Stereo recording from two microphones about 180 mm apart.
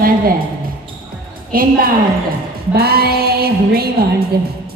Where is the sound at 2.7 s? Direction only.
60° right (ahead or behind).